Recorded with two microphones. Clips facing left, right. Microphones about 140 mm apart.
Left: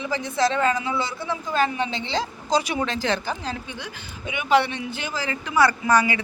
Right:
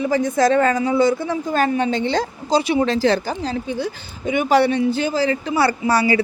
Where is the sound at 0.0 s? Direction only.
45° right (ahead or behind).